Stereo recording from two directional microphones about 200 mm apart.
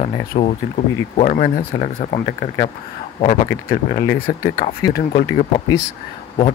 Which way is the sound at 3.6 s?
40° left (ahead or behind).